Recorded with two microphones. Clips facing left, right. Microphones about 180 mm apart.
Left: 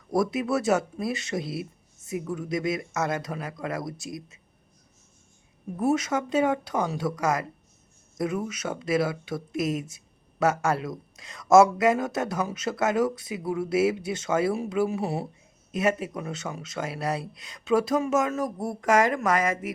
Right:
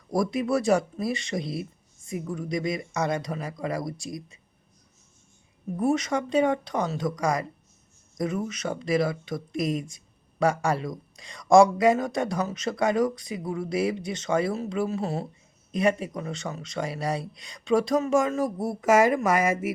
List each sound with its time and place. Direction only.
0.1 s speech: 5° left (ahead or behind)
5.8 s speech: 5° left (ahead or behind); by 19.7 s 10° right (ahead or behind)